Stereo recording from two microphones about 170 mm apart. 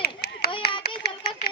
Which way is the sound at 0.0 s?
70° left (ahead or behind).